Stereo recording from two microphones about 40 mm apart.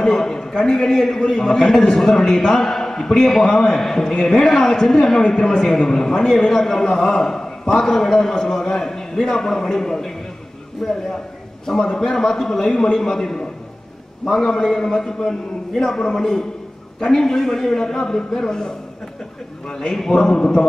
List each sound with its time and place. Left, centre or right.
0.0 s a man's voice: centre
5.2 s a man's voice: left
19.7 s a man's voice: centre